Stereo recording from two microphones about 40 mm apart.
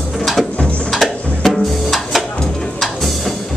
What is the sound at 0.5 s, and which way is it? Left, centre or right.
Music, left.